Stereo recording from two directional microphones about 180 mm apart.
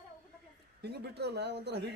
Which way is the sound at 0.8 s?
65° right (ahead or behind).